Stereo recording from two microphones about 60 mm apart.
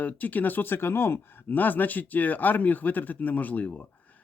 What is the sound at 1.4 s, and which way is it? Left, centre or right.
Speech, left.